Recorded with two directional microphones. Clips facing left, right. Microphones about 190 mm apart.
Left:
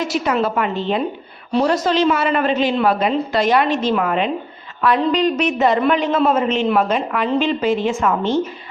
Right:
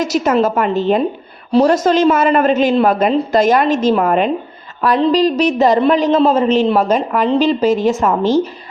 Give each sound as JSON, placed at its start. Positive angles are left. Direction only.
{"t": 0.0, "sound": "a woman's voice", "side_deg": -45}